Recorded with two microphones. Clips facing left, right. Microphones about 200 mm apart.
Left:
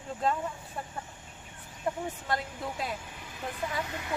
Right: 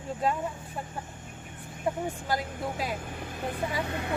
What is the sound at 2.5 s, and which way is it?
Speech, 50° right (ahead or behind).